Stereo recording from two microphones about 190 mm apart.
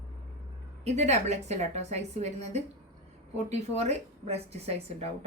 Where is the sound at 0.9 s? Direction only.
35° right (ahead or behind).